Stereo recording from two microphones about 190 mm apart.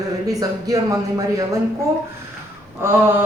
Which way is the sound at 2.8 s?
10° right (ahead or behind).